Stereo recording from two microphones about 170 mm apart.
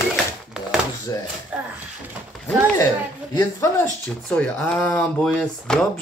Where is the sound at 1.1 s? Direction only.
20° left (ahead or behind).